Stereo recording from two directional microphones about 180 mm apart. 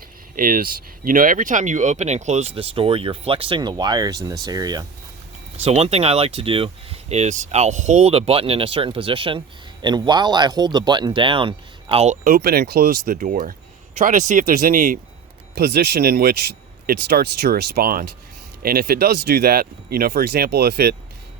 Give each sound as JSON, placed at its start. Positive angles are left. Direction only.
{"t": 0.3, "sound": "speech", "side_deg": -50}
{"t": 5.5, "sound": "speech", "side_deg": -35}
{"t": 12.2, "sound": "speech", "side_deg": -55}
{"t": 15.5, "sound": "speech", "side_deg": -60}